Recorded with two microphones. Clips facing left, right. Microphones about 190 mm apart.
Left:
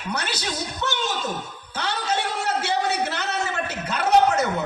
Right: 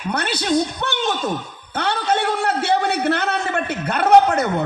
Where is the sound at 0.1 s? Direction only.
60° right (ahead or behind).